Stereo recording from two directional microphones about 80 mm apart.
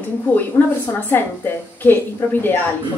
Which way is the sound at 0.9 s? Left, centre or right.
Left.